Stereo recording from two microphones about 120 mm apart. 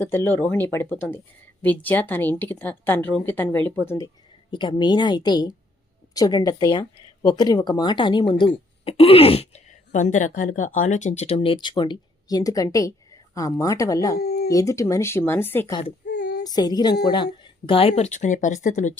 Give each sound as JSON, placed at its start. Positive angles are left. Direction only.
{"t": 0.0, "sound": "speech", "side_deg": 15}
{"t": 4.5, "sound": "speech", "side_deg": 40}
{"t": 11.3, "sound": "speech", "side_deg": 45}
{"t": 16.4, "sound": "speech", "side_deg": 35}